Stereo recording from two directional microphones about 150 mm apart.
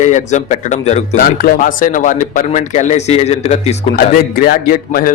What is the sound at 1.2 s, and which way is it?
Speech, 70° left (ahead or behind).